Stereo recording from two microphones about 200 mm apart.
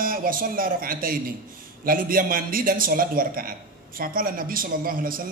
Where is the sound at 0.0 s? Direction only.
45° right (ahead or behind).